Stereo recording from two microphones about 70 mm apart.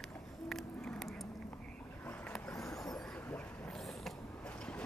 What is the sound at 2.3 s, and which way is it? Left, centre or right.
Vehicle, centre.